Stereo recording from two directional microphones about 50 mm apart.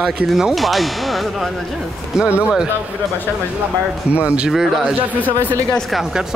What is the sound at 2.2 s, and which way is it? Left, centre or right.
Speech, right.